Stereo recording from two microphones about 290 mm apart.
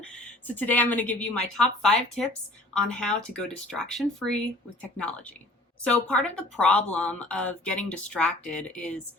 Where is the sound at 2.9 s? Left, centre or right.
Centre.